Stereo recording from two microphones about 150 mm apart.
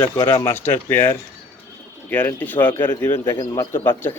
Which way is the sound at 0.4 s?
15° left (ahead or behind).